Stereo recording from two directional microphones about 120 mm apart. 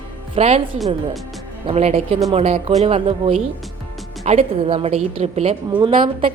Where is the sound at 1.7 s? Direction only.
55° right (ahead or behind).